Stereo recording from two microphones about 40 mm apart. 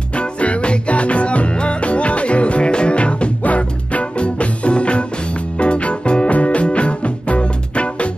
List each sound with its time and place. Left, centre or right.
0.1 s music: left